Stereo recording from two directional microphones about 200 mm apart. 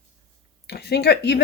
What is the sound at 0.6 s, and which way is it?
Speech, 55° left (ahead or behind).